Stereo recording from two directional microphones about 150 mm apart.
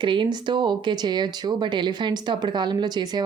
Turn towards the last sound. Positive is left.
turn(degrees=-30)  # may be behind; listen again after turning